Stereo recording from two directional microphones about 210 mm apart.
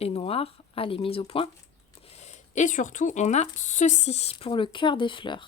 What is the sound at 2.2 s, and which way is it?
Speech, 35° left (ahead or behind).